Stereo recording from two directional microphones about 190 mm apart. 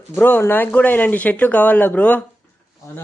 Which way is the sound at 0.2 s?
10° left (ahead or behind).